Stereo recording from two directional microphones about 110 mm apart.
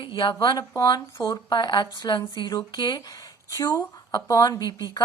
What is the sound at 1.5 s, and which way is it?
A woman's voice, 45° left (ahead or behind).